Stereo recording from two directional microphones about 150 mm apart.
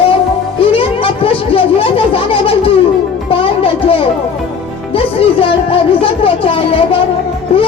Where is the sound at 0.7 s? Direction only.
35° left (ahead or behind).